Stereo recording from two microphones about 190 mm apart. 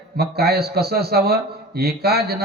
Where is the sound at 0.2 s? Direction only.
55° right (ahead or behind).